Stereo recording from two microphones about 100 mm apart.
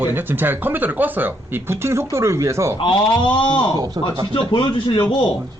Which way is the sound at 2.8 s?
55° left (ahead or behind).